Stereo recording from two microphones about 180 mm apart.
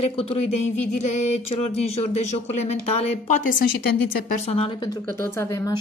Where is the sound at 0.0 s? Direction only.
30° left (ahead or behind).